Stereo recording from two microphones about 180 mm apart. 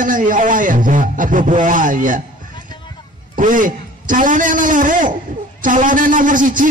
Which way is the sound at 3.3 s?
50° right (ahead or behind).